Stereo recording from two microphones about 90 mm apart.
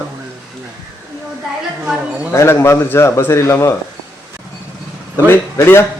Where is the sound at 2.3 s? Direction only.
30° left (ahead or behind).